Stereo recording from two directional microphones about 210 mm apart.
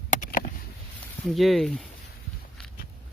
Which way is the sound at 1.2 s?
Centre (ahead or behind).